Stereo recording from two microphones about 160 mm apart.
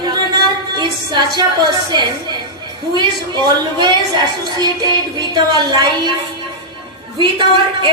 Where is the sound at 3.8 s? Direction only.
25° right (ahead or behind).